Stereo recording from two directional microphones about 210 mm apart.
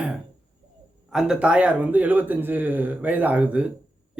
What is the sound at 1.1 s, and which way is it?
Speech, 5° right (ahead or behind).